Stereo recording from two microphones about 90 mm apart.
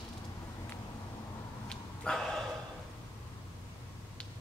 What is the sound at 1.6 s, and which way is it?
Dog, 10° left (ahead or behind).